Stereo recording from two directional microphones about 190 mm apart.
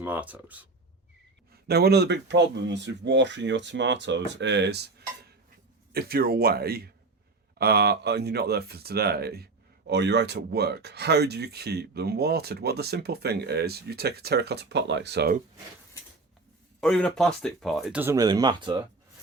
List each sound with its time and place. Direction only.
0.0 s speech: 10° right (ahead or behind)
1.6 s speech: 55° right (ahead or behind)
16.8 s speech: centre (ahead or behind); by 18.8 s 25° right (ahead or behind)